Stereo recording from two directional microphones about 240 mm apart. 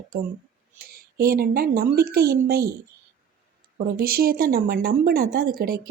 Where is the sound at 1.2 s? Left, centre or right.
Right.